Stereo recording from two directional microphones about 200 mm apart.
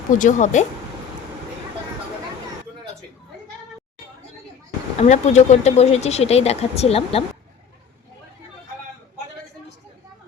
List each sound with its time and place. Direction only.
0.1 s speech: 40° left (ahead or behind)
4.9 s speech: 35° left (ahead or behind)